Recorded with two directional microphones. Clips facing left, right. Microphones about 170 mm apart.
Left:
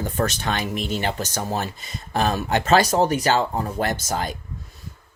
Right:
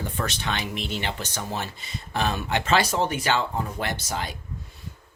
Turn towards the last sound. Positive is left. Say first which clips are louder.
# left 5 dB
turn(degrees=45)  # may be behind; listen again after turning